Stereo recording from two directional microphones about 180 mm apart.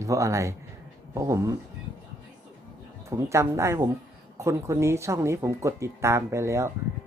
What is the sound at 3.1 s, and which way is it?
A man's voice, 15° right (ahead or behind).